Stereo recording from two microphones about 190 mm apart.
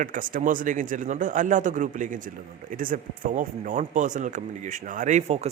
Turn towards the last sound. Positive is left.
turn(degrees=-35)  # may be behind; listen again after turning